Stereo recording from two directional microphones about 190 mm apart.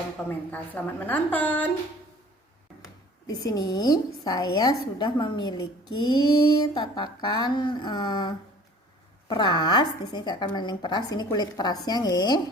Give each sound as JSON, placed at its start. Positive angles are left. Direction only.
{"t": 0.3, "sound": "a woman's voice", "side_deg": 10}
{"t": 3.2, "sound": "a woman's voice", "side_deg": 20}